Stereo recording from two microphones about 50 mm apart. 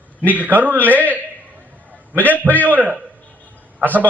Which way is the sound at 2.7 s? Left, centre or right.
Right.